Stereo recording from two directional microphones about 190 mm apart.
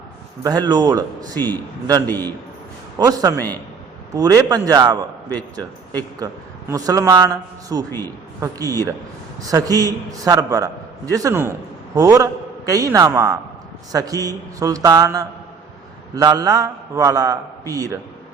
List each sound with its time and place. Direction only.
0.4 s a man's voice: 20° right (ahead or behind)
1.4 s a man's voice: 10° left (ahead or behind)
3.0 s a man's voice: 20° right (ahead or behind)
3.3 s a man's voice: 10° left (ahead or behind)
4.1 s a man's voice: 20° right (ahead or behind)
6.1 s a man's voice: 20° right (ahead or behind)